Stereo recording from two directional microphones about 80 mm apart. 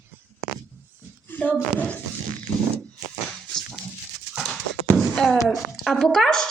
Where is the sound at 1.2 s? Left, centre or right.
Left.